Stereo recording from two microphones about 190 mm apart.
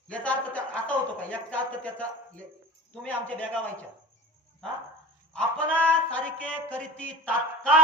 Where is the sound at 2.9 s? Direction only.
5° left (ahead or behind).